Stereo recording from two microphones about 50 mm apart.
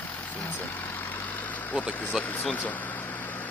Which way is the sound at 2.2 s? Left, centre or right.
Left.